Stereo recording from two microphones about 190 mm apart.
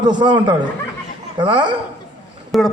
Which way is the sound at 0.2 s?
25° right (ahead or behind).